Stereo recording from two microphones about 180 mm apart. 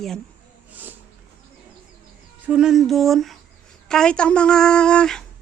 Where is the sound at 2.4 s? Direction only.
5° right (ahead or behind).